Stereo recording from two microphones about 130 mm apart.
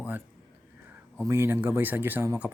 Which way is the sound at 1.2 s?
20° right (ahead or behind).